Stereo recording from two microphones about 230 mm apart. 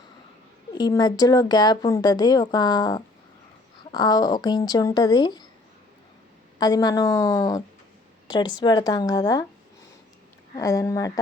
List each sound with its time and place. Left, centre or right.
0.8 s speech: centre
6.6 s speech: centre
10.5 s speech: centre